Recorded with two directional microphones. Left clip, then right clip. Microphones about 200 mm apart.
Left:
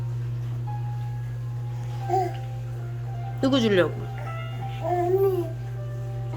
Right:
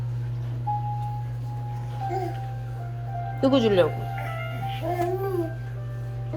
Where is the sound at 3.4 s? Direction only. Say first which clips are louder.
Right 1 dB; 20° left (ahead or behind).